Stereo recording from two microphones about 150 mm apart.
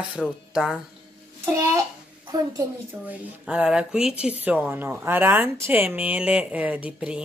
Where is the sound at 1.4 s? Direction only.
20° right (ahead or behind).